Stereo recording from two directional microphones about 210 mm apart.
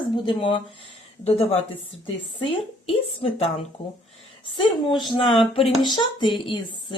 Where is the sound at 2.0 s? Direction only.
25° left (ahead or behind).